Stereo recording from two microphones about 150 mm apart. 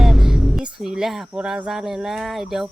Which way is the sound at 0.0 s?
Centre (ahead or behind).